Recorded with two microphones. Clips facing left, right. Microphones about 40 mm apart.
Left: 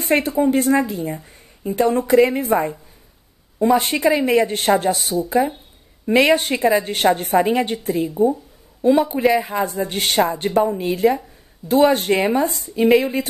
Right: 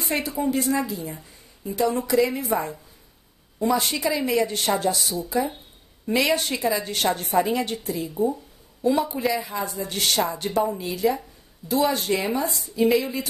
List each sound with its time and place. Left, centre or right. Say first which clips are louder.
0.0 s speech: left 8 dB; left